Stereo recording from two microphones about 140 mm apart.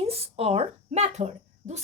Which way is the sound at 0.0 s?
45° right (ahead or behind).